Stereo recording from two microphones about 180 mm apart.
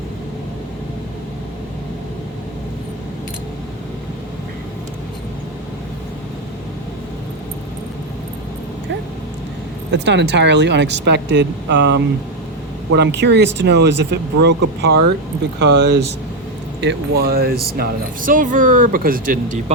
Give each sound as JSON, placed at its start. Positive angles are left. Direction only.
{"t": 9.9, "sound": "a woman's voice", "side_deg": -75}